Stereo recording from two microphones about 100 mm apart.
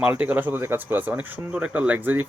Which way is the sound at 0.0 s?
15° right (ahead or behind).